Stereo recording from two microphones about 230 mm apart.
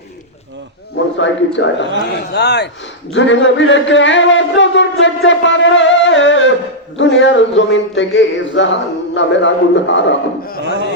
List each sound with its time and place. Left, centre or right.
1.2 s speech: left